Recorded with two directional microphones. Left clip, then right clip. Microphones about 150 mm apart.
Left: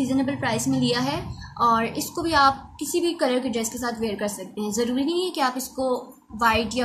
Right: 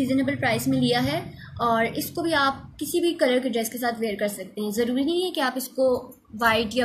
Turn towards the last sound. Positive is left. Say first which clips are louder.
# left 1 dB
turn(degrees=5)  # may be behind; listen again after turning